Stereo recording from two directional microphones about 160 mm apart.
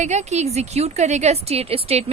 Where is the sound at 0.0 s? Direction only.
45° right (ahead or behind).